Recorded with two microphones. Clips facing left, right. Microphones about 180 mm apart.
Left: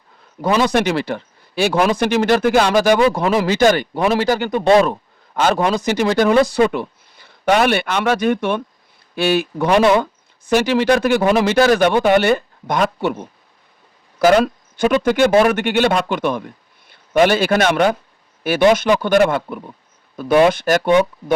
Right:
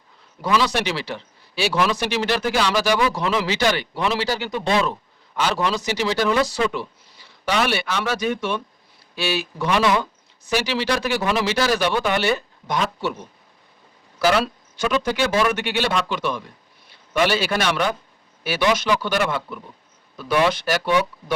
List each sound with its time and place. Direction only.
0.4 s a man's voice: 50° left (ahead or behind)